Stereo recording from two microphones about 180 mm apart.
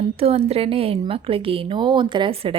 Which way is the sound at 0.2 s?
35° right (ahead or behind).